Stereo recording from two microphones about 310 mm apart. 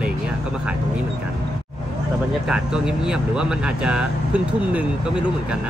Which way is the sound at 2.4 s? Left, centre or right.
Centre.